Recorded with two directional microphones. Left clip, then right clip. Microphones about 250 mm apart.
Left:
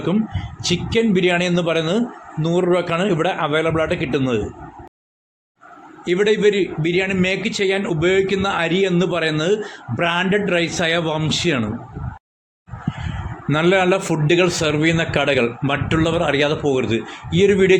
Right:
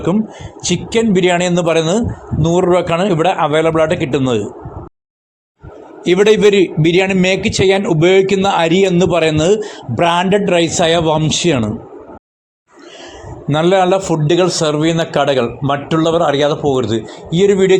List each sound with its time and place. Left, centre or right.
0.6 s a man's voice: centre
6.1 s a man's voice: right
13.5 s a man's voice: centre